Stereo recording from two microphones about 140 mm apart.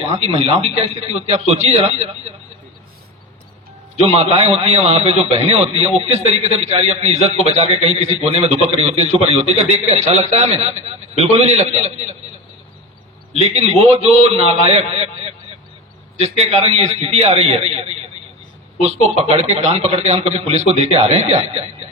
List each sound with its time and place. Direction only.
0.3 s a man's voice: 50° right (ahead or behind)
3.9 s a man's voice: 50° right (ahead or behind)
13.3 s a man's voice: 50° right (ahead or behind)